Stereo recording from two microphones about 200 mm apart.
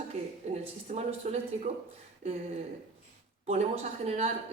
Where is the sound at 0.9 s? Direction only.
35° right (ahead or behind).